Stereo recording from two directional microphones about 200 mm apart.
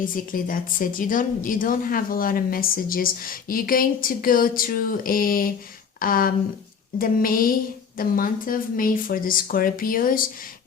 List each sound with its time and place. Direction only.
0.0 s a woman's voice: 45° left (ahead or behind)